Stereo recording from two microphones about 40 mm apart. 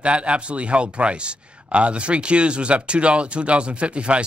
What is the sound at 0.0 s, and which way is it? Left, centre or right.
A man's voice, right.